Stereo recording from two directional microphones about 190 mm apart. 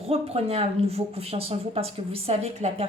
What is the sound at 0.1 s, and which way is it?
Speech, 30° right (ahead or behind).